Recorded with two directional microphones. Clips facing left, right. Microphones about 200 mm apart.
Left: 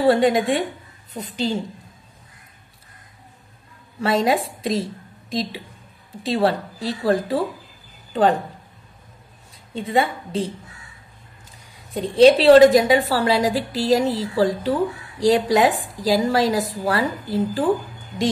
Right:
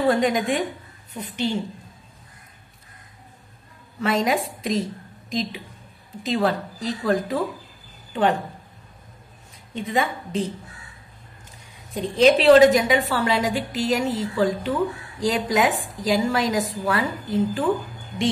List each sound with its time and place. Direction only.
0.0 s a woman's voice: 30° left (ahead or behind)
4.0 s a woman's voice: 35° left (ahead or behind)
9.8 s a woman's voice: 30° left (ahead or behind)
11.9 s a woman's voice: 30° left (ahead or behind)